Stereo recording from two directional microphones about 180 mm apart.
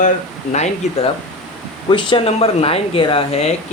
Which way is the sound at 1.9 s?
30° left (ahead or behind).